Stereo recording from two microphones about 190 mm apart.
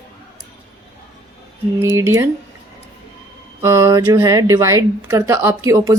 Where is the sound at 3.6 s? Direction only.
15° right (ahead or behind).